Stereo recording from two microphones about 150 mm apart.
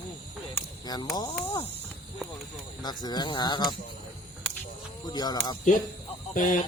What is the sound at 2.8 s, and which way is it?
Speech, 25° left (ahead or behind).